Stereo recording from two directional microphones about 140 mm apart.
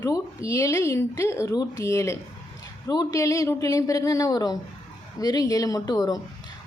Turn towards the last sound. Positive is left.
turn(degrees=25)  # may be behind; listen again after turning